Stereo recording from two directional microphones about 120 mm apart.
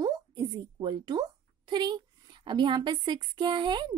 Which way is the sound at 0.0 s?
35° right (ahead or behind).